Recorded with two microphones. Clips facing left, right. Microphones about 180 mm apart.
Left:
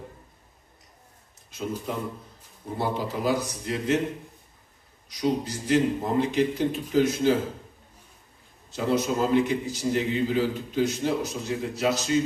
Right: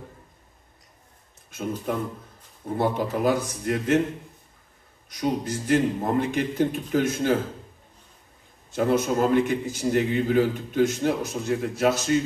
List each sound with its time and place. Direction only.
1.9 s a man's voice: 55° right (ahead or behind)
5.1 s a man's voice: 55° right (ahead or behind)
8.7 s a man's voice: 50° right (ahead or behind)